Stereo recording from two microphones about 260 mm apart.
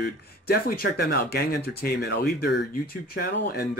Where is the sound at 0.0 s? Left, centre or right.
Left.